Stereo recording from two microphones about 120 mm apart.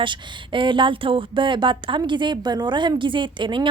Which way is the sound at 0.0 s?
45° right (ahead or behind).